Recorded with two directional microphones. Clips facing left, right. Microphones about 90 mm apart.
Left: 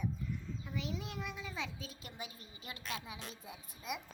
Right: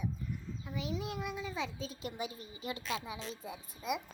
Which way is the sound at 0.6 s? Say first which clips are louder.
Right 5 dB; 5° right (ahead or behind).